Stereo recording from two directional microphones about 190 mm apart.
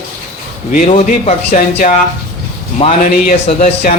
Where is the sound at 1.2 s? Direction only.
35° left (ahead or behind).